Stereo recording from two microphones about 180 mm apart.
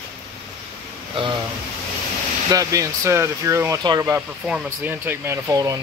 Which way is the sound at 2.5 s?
20° right (ahead or behind).